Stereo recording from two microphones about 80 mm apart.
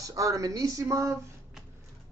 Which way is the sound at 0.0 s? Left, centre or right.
Right.